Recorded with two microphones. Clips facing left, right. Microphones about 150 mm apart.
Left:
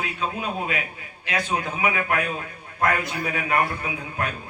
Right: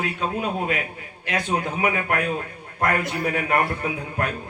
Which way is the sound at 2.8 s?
55° right (ahead or behind).